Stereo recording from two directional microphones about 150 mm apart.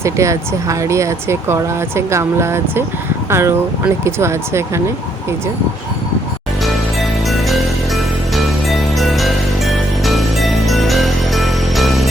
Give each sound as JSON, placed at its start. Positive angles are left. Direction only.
{"t": 0.0, "sound": "speech", "side_deg": -20}
{"t": 7.0, "sound": "music", "side_deg": 0}